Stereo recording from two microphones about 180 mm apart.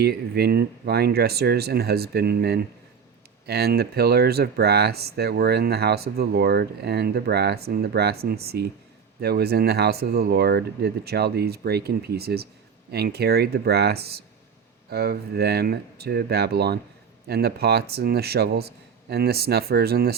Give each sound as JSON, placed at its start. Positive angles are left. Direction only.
{"t": 0.0, "sound": "speech", "side_deg": -60}